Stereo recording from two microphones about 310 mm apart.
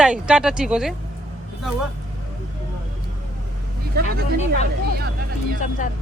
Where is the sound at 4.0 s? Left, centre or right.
Right.